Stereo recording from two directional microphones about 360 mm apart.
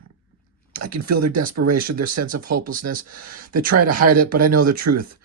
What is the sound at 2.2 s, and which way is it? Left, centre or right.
Speech, right.